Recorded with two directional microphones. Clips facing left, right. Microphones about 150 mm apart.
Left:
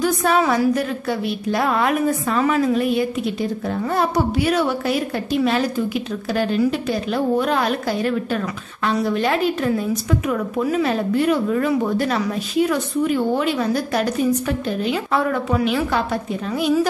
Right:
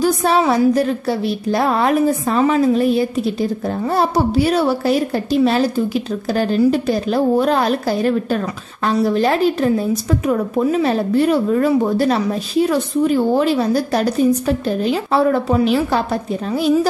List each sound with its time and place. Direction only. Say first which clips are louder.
0.0 s a woman's voice: right 3 dB; 30° right (ahead or behind)